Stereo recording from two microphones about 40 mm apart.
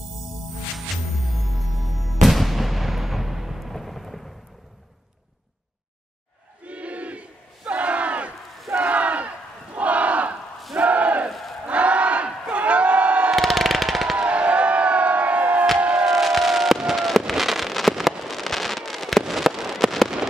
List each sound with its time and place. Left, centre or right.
2.2 s artillery fire: centre
6.6 s battle cry: right
8.7 s a sound: right
9.8 s battle cry: right
11.2 s battle cry: centre
11.6 s battle cry: right
12.5 s crowd: right
13.4 s a sound: centre
14.1 s crowd: right
15.8 s music: right
16.1 s fireworks: centre